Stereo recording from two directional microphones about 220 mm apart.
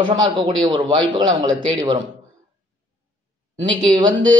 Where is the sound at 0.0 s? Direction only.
20° right (ahead or behind).